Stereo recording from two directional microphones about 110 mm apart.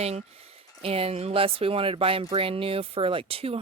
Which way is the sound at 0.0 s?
70° right (ahead or behind).